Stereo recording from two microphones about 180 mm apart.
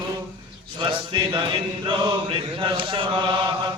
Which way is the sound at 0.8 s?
25° right (ahead or behind).